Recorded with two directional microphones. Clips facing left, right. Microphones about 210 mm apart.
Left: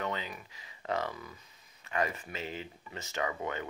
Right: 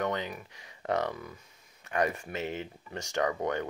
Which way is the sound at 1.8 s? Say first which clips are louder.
Right 4 dB; 50° right (ahead or behind).